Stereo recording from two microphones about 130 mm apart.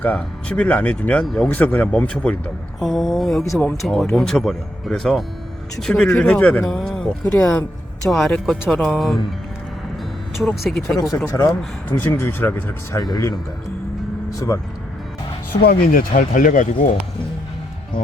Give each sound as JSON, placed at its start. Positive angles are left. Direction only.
{"t": 0.0, "sound": "speech", "side_deg": 5}
{"t": 10.3, "sound": "speech", "side_deg": 0}
{"t": 11.3, "sound": "speech", "side_deg": 20}
{"t": 13.0, "sound": "speech", "side_deg": 30}
{"t": 15.9, "sound": "speech", "side_deg": 90}